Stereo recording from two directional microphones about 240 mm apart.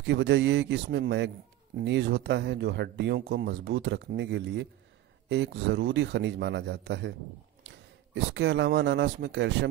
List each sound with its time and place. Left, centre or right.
0.0 s speech: right